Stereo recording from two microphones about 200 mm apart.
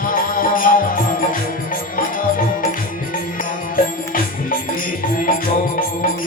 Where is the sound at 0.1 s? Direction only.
45° left (ahead or behind).